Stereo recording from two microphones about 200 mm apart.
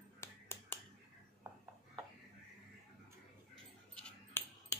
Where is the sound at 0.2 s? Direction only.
10° left (ahead or behind).